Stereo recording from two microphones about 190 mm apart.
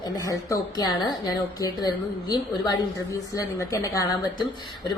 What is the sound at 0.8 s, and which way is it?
A woman's voice, 20° left (ahead or behind).